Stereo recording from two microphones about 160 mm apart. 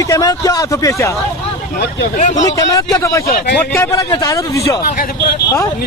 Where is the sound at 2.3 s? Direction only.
20° left (ahead or behind).